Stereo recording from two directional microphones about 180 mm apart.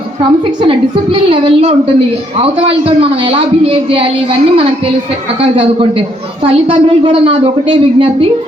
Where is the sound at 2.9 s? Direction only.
30° right (ahead or behind).